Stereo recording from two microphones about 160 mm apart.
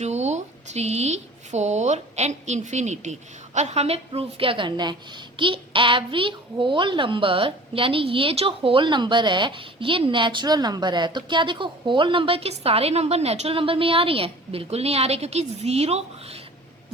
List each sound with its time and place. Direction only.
0.0 s a child's voice: 45° right (ahead or behind)